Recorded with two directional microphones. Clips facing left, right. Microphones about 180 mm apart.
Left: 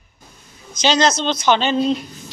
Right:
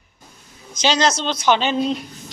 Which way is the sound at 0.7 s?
10° right (ahead or behind).